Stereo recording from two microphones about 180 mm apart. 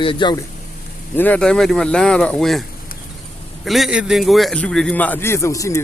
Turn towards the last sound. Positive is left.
turn(degrees=15)  # may be behind; listen again after turning